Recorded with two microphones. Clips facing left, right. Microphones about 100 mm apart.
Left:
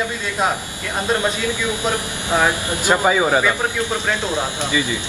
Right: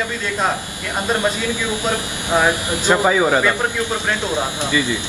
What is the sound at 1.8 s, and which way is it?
Speech, 15° right (ahead or behind).